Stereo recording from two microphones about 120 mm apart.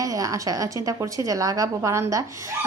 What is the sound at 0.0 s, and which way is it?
A woman's voice, 30° right (ahead or behind).